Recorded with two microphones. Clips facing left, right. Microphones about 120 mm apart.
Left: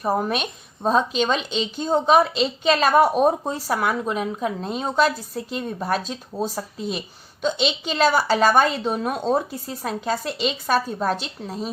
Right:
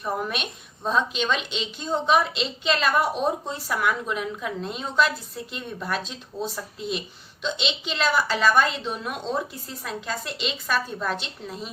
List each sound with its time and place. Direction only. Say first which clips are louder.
0.0 s a woman's voice: left 6 dB; 40° left (ahead or behind)